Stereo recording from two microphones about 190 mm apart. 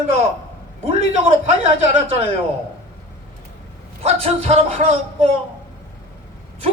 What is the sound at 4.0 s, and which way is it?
A man's voice, 30° right (ahead or behind).